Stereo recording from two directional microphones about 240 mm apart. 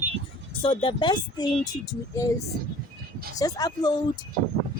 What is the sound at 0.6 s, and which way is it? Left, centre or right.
Speech, left.